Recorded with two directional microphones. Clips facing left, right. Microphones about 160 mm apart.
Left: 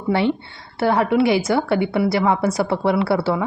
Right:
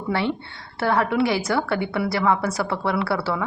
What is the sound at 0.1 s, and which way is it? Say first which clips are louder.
A woman's voice: left 5 dB; 15° left (ahead or behind).